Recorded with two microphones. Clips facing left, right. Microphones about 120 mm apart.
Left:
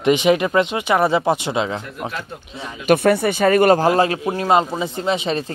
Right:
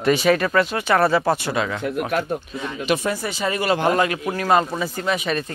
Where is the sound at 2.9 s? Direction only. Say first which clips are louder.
Left 9 dB; 60° left (ahead or behind).